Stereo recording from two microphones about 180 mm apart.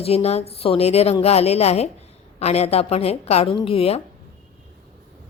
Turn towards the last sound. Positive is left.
turn(degrees=30)  # may be behind; listen again after turning